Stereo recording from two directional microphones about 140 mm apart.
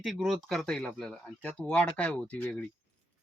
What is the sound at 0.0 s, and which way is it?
Speech, centre (ahead or behind).